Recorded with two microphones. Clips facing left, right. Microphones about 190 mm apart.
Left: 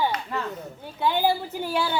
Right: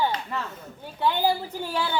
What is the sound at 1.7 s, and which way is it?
Speech, 10° left (ahead or behind).